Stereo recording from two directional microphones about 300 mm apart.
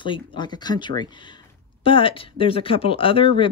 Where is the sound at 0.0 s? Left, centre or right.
Centre.